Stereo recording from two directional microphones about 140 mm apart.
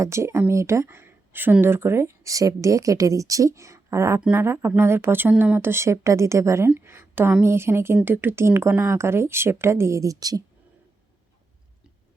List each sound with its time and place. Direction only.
0.0 s speech: 20° right (ahead or behind)